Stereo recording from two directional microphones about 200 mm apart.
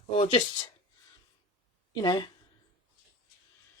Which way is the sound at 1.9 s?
20° left (ahead or behind).